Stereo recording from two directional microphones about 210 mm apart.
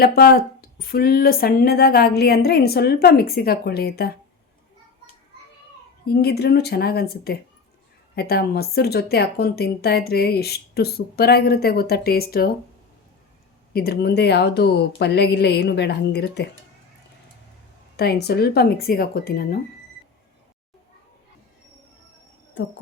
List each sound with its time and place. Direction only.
0.0 s speech: 45° left (ahead or behind)
6.1 s speech: 50° left (ahead or behind)
13.7 s speech: 50° left (ahead or behind)
17.9 s speech: 50° left (ahead or behind)